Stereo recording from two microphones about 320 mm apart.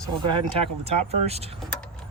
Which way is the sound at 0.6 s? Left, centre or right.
Centre.